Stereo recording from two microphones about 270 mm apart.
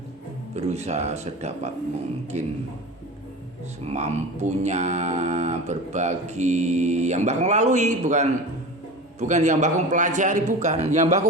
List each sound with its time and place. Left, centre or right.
0.5 s speech: right
3.8 s speech: right